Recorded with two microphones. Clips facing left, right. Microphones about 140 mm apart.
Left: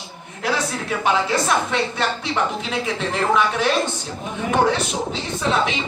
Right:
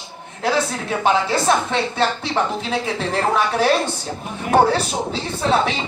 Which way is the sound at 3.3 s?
35° right (ahead or behind).